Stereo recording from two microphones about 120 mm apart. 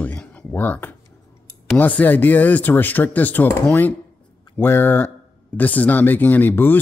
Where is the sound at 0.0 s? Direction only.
10° left (ahead or behind).